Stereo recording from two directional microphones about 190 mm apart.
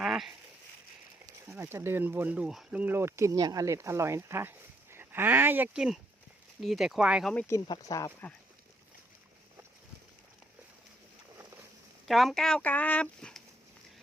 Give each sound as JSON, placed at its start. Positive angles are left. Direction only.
{"t": 0.0, "sound": "a sound", "side_deg": 0}
{"t": 1.5, "sound": "speech", "side_deg": -10}
{"t": 7.3, "sound": "speech", "side_deg": 15}
{"t": 12.0, "sound": "speech", "side_deg": 0}